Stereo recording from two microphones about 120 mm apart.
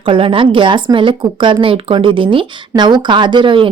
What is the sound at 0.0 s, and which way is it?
Speech, 45° right (ahead or behind).